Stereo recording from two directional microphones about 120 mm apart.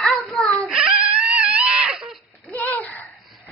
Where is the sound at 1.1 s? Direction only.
15° right (ahead or behind).